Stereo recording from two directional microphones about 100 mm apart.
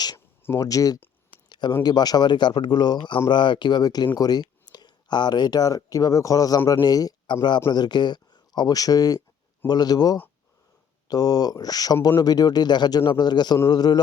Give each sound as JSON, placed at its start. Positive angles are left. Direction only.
{"t": 0.5, "sound": "speech", "side_deg": 35}
{"t": 1.5, "sound": "a sound", "side_deg": 50}
{"t": 1.8, "sound": "a man's voice", "side_deg": 45}